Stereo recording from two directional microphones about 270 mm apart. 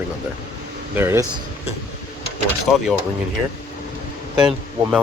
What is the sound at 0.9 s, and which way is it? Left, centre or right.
Speech, centre.